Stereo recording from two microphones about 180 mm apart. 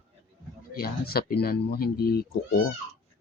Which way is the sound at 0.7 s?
60° left (ahead or behind).